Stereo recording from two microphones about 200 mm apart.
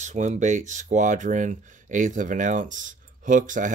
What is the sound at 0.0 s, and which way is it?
Speech, 35° right (ahead or behind).